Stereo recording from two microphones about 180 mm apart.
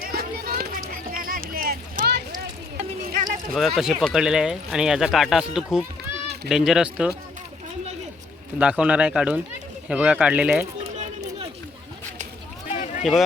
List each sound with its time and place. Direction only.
0.0 s run: 55° right (ahead or behind)
1.1 s a sound: 50° right (ahead or behind)
3.2 s speech: centre (ahead or behind)
8.5 s speech: 5° right (ahead or behind)
10.9 s chatter: 40° right (ahead or behind)
12.7 s boat: 40° left (ahead or behind)